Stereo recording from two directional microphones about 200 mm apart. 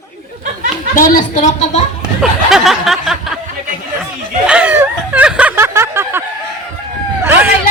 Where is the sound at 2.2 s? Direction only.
Centre (ahead or behind).